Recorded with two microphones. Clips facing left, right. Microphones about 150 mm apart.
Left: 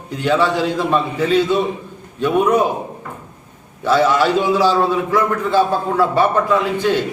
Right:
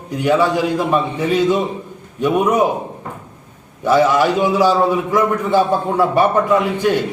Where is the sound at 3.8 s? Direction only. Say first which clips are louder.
Right 1 dB; 15° right (ahead or behind).